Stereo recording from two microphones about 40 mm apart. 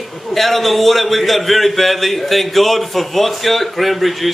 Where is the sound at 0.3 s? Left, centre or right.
Centre.